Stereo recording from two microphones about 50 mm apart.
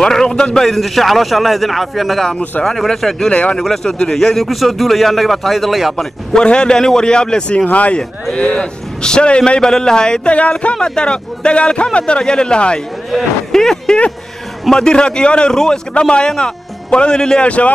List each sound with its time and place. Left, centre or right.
0.0 s a man's voice: centre
0.6 s speech: centre
3.3 s speech: left
3.6 s a man's voice: centre
5.9 s a man's voice: centre
7.6 s speech: left
8.4 s speech: centre
9.6 s a man's voice: centre
17.5 s speech: left